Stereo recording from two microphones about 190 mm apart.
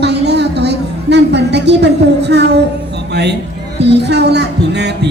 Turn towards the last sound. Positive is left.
turn(degrees=-65)  # may be behind; listen again after turning